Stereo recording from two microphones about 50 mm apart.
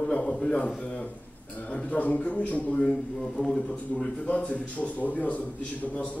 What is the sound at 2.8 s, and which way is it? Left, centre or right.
Speech, centre.